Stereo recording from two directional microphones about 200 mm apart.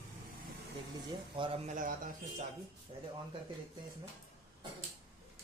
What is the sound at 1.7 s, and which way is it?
Speech, 45° right (ahead or behind).